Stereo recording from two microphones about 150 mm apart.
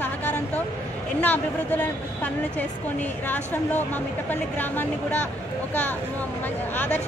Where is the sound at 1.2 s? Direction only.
10° left (ahead or behind).